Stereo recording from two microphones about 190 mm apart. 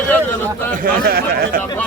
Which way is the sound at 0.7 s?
50° right (ahead or behind).